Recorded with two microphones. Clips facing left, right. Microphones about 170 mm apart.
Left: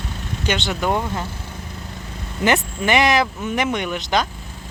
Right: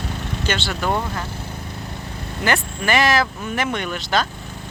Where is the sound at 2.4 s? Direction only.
20° left (ahead or behind).